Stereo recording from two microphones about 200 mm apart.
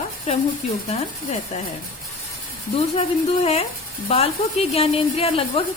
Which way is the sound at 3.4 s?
30° left (ahead or behind).